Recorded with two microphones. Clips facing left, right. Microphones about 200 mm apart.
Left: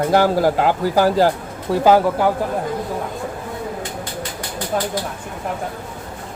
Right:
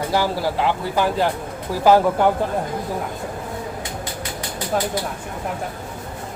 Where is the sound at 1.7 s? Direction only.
20° left (ahead or behind).